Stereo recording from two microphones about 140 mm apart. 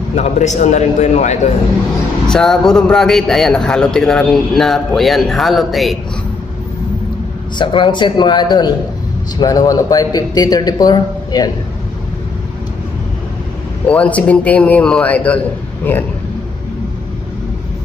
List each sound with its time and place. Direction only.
0.1 s a man's voice: 55° left (ahead or behind)
2.2 s a man's voice: 5° left (ahead or behind)
7.5 s a man's voice: 35° left (ahead or behind)
13.8 s a man's voice: 10° left (ahead or behind)